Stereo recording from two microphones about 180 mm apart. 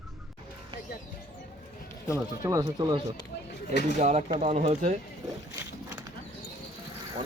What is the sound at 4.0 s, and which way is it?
Speech, 40° right (ahead or behind).